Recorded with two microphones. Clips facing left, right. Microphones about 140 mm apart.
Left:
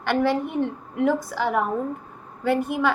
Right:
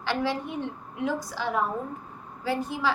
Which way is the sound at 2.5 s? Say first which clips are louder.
Left 6 dB; 60° left (ahead or behind).